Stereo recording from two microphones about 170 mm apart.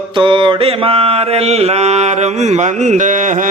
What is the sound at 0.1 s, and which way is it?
Mantra, 30° right (ahead or behind).